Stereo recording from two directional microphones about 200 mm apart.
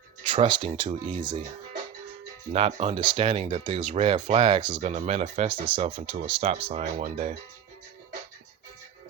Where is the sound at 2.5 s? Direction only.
30° right (ahead or behind).